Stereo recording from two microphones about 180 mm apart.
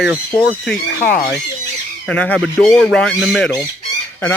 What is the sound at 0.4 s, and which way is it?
Speech, centre (ahead or behind).